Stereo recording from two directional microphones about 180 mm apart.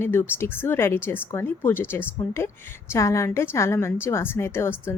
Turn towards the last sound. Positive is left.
turn(degrees=15)  # may be behind; listen again after turning